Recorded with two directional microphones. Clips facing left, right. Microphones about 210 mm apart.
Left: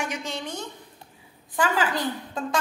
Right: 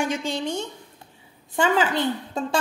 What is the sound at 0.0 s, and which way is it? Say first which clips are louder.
A woman's voice: right 6 dB; 30° right (ahead or behind).